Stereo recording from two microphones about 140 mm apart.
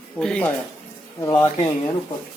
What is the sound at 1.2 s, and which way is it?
Speech, 25° left (ahead or behind).